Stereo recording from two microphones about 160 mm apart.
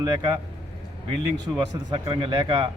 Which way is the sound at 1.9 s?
25° right (ahead or behind).